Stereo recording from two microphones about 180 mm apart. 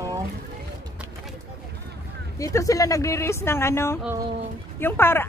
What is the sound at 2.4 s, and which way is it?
A woman's voice, 15° left (ahead or behind).